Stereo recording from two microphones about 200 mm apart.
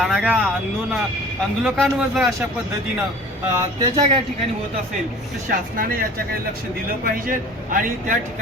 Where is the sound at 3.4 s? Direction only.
15° right (ahead or behind).